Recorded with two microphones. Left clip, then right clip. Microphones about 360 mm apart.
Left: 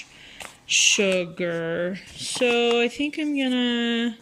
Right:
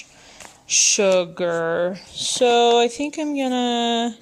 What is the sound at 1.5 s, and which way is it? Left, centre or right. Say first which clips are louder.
Speech: right 7 dB; right.